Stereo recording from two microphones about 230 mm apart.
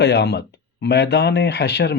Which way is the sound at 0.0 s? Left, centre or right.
Left.